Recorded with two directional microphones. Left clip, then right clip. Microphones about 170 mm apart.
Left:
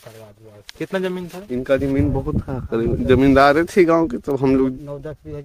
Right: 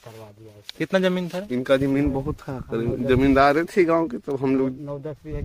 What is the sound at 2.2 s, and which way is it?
Speech, 50° left (ahead or behind).